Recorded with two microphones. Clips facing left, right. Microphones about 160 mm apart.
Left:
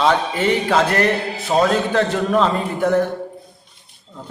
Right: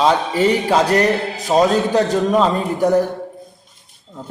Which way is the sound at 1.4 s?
15° right (ahead or behind).